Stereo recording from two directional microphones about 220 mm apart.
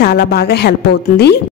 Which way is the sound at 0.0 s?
45° left (ahead or behind).